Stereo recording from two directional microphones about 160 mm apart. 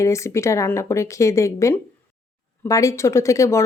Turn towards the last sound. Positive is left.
turn(degrees=20)  # may be behind; listen again after turning